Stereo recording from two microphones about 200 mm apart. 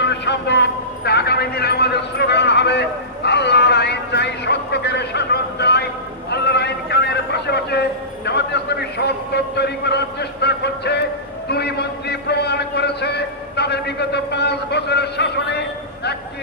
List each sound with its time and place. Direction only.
0.0 s a man's voice: 60° left (ahead or behind)
6.3 s a sound: 55° left (ahead or behind)
8.3 s a man's voice: 55° left (ahead or behind)